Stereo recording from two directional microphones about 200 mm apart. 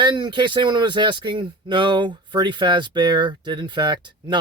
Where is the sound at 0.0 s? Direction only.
20° right (ahead or behind).